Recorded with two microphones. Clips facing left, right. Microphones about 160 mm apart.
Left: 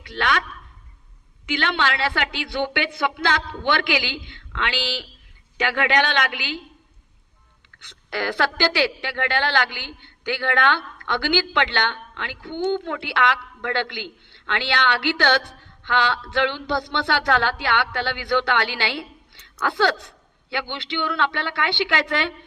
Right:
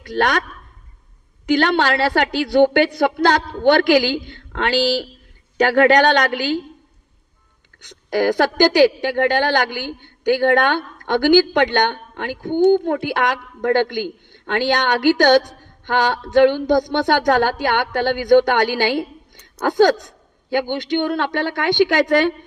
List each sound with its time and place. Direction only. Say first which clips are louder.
0.0 s a woman's voice: right 5 dB; 45° right (ahead or behind)
1.5 s a woman's voice: right 8 dB; 45° right (ahead or behind)
7.9 s a woman's voice: right 9 dB; 45° right (ahead or behind)